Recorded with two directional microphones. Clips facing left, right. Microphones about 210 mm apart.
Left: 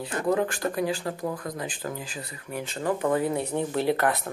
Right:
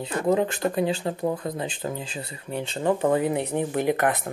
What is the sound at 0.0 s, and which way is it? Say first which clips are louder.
Speech: right 3 dB; 20° right (ahead or behind).